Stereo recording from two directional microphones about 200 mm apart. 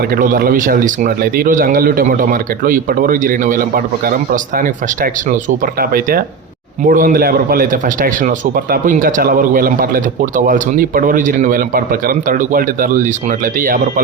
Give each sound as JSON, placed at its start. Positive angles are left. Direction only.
{"t": 0.1, "sound": "a man's voice", "side_deg": -45}